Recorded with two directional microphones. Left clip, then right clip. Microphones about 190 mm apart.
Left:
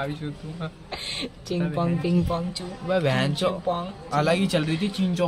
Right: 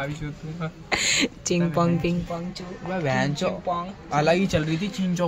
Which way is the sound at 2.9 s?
20° left (ahead or behind).